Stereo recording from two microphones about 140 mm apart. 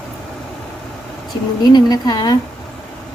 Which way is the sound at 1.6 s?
30° left (ahead or behind).